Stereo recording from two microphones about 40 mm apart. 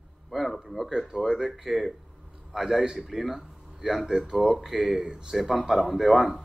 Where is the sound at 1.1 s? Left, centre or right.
Centre.